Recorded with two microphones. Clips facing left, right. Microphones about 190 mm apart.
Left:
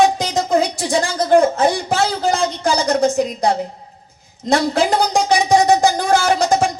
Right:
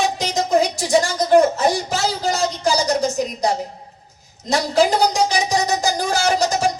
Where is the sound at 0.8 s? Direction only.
55° left (ahead or behind).